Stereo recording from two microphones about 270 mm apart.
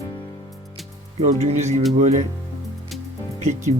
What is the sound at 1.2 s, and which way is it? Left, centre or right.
Speech, right.